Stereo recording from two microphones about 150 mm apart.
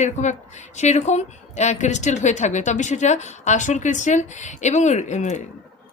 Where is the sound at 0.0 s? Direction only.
50° left (ahead or behind).